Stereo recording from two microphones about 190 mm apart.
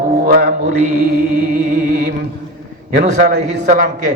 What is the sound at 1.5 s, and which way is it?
Music, 45° right (ahead or behind).